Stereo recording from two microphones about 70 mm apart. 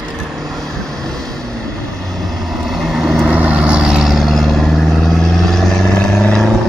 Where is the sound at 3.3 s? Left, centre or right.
Centre.